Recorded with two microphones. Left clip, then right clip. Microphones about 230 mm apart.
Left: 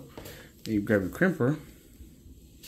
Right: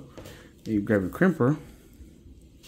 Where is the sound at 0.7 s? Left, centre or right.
Centre.